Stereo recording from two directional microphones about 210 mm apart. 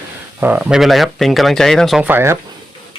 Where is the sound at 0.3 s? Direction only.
10° right (ahead or behind).